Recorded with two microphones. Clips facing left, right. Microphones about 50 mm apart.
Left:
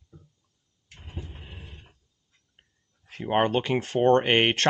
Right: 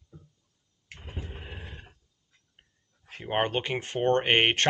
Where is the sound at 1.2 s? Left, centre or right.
Right.